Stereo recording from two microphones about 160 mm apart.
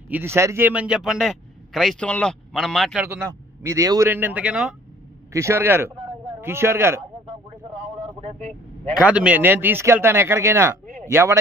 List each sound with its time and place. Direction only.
0.1 s a man's voice: 15° right (ahead or behind)
3.6 s a man's voice: 20° right (ahead or behind)
4.1 s a man's voice: 10° right (ahead or behind)
5.3 s a man's voice: 15° right (ahead or behind)
8.9 s a man's voice: 5° right (ahead or behind)